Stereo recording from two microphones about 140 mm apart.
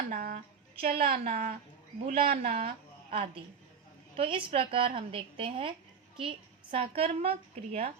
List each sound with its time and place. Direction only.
0.1 s a sound: 85° right
2.0 s speech: 90° right
3.1 s a woman's voice: 40° right (ahead or behind)